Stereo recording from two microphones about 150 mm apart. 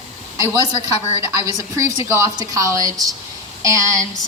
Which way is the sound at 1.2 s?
20° right (ahead or behind).